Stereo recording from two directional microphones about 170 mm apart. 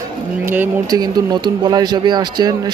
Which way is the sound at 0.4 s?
15° right (ahead or behind).